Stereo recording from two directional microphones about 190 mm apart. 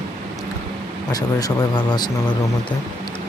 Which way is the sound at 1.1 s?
20° left (ahead or behind).